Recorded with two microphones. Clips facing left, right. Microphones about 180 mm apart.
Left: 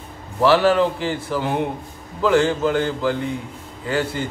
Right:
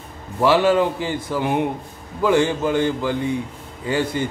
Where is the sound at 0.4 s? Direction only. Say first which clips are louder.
Even; 15° right (ahead or behind).